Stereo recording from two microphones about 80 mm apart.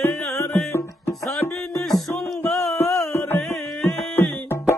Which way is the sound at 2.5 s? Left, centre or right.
Centre.